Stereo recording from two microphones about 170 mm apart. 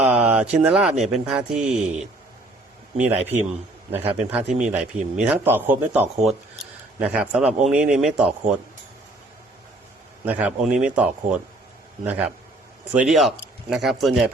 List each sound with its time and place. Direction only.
0.0 s a man's voice: 10° right (ahead or behind)
10.2 s a man's voice: 10° right (ahead or behind)